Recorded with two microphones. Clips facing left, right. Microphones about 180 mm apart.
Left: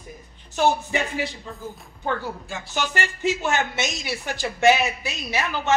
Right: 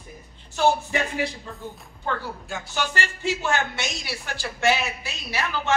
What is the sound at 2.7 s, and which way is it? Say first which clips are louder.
A woman's voice: left 2 dB; 20° left (ahead or behind).